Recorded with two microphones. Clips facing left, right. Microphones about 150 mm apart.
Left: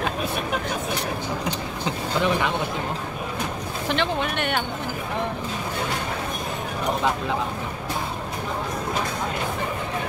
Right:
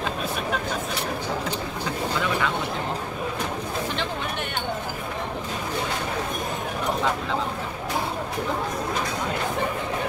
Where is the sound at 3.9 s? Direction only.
75° left (ahead or behind).